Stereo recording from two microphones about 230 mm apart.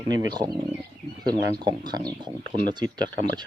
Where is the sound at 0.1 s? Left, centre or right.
Centre.